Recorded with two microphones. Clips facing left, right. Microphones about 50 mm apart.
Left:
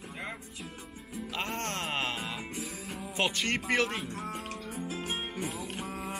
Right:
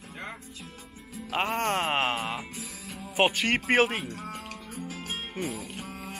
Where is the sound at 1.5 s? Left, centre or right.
Centre.